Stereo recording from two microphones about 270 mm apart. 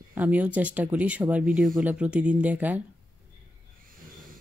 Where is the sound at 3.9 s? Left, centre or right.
Right.